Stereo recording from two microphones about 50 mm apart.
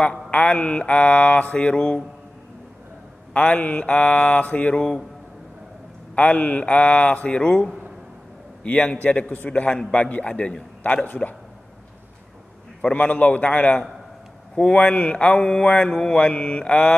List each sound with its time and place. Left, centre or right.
0.3 s mantra: left
3.3 s mantra: left
6.1 s mantra: left
8.9 s mantra: left
12.8 s mantra: left